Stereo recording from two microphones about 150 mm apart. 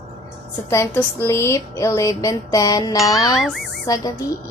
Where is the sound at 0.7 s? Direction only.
20° left (ahead or behind).